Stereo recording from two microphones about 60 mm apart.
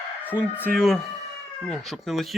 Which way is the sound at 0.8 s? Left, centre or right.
Centre.